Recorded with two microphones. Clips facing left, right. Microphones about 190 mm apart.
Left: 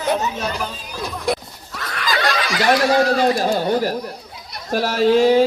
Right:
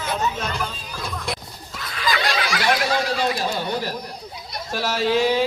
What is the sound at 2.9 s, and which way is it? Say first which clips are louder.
Speech: left 7 dB; 45° left (ahead or behind).